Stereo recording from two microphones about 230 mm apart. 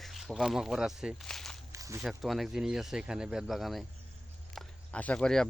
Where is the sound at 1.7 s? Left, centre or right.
Centre.